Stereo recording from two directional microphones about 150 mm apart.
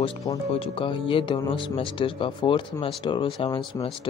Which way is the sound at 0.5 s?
35° left (ahead or behind).